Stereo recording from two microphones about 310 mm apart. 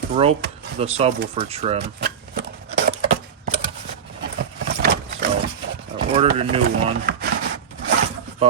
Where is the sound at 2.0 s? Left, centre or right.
Right.